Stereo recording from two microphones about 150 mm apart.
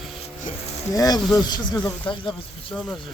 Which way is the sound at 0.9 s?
25° left (ahead or behind).